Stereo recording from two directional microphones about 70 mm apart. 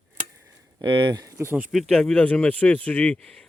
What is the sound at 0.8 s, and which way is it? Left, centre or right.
Speech, right.